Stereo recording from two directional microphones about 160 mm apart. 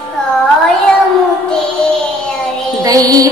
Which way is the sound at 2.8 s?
20° right (ahead or behind).